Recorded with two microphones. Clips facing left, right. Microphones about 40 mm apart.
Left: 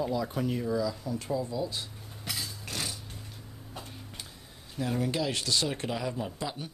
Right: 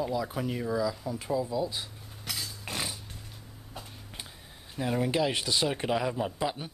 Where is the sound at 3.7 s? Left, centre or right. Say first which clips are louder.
Left 1 dB; centre.